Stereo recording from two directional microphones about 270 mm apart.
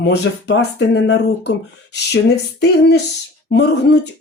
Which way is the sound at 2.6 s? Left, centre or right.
Left.